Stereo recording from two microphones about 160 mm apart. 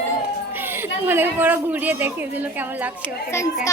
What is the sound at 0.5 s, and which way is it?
A woman's voice, 15° right (ahead or behind).